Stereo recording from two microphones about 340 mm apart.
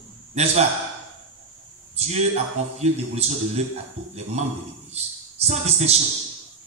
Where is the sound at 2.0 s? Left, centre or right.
Centre.